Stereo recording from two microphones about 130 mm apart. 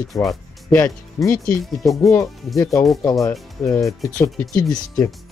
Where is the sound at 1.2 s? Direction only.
15° left (ahead or behind).